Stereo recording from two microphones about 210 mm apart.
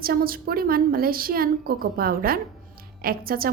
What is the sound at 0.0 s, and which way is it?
A woman's voice, 45° right (ahead or behind).